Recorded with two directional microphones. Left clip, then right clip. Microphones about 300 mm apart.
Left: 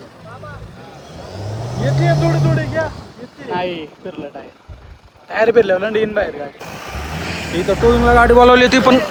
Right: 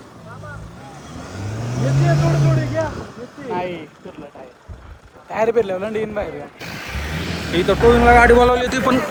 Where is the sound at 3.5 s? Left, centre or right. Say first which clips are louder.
Left 4 dB; left.